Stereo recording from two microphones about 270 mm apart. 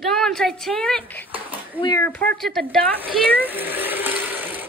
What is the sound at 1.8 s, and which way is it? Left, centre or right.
Speech, centre.